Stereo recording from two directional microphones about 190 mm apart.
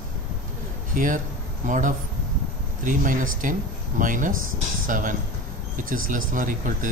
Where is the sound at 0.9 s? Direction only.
45° right (ahead or behind).